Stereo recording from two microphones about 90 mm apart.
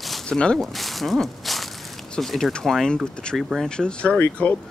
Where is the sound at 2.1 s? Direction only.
5° left (ahead or behind); by 4.6 s 20° left (ahead or behind).